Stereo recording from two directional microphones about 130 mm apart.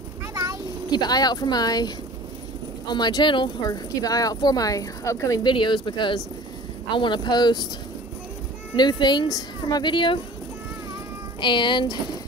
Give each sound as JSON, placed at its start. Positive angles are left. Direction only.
{"t": 0.3, "sound": "a sound", "side_deg": -25}
{"t": 0.8, "sound": "speech", "side_deg": 30}
{"t": 2.9, "sound": "speech", "side_deg": 35}
{"t": 5.4, "sound": "speech", "side_deg": 35}
{"t": 8.7, "sound": "speech", "side_deg": 35}
{"t": 11.4, "sound": "speech", "side_deg": 35}